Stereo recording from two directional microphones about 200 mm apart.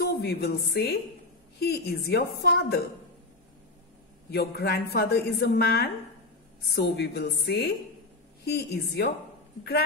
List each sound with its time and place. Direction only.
0.0 s a woman's voice: 55° left (ahead or behind)
4.3 s a woman's voice: 55° left (ahead or behind)